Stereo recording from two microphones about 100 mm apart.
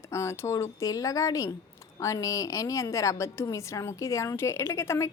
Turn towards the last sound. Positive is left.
turn(degrees=30)  # may be behind; listen again after turning